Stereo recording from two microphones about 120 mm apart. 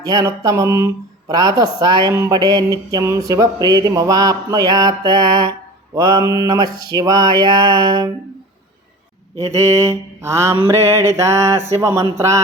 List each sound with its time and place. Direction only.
0.0 s mantra: 30° right (ahead or behind)
1.3 s a sound: 30° right (ahead or behind)
9.4 s mantra: 25° right (ahead or behind)